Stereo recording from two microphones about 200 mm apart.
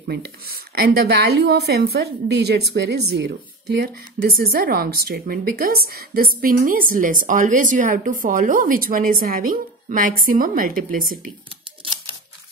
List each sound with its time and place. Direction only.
0.1 s a woman's voice: 50° right (ahead or behind)
11.8 s typewriter: 25° right (ahead or behind)